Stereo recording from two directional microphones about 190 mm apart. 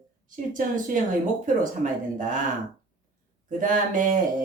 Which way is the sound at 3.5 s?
45° right (ahead or behind).